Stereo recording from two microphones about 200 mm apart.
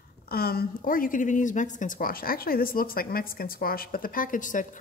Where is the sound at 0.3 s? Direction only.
50° left (ahead or behind).